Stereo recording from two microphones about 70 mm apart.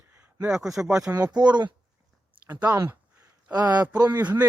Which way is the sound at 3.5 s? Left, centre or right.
Right.